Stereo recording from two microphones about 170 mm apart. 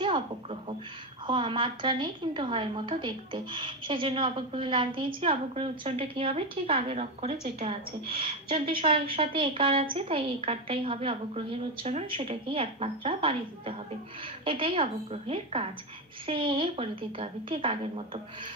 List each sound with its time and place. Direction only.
0.0 s a woman's voice: 30° right (ahead or behind)